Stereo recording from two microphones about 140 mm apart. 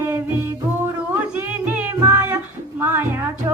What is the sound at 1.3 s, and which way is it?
Music, 10° right (ahead or behind).